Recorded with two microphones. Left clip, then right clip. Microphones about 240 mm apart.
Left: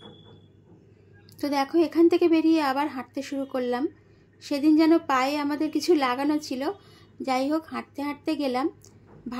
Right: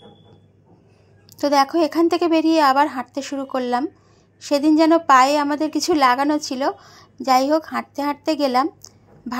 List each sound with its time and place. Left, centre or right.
1.3 s a woman's voice: centre